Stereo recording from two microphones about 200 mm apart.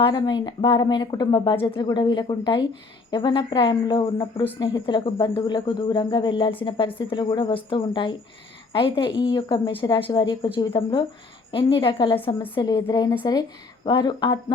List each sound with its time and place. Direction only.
0.0 s speech: 20° left (ahead or behind)